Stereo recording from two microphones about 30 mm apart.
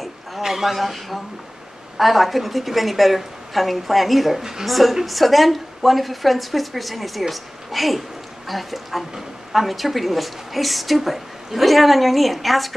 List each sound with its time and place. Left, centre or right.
0.4 s a man's voice: centre
4.4 s a woman's voice: centre
4.6 s a woman's voice: centre